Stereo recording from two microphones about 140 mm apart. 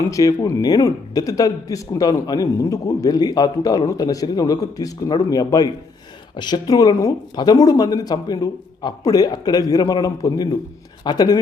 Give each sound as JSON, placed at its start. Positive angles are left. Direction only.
{"t": 0.1, "sound": "speech", "side_deg": 25}